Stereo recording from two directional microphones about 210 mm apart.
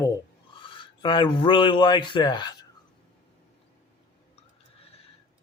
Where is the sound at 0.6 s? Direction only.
25° left (ahead or behind).